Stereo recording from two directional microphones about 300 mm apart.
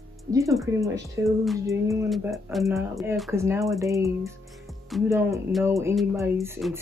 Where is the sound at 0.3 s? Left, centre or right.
Centre.